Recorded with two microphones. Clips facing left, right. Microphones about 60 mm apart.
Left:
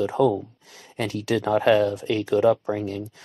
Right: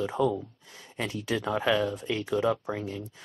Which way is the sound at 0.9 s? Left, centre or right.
Left.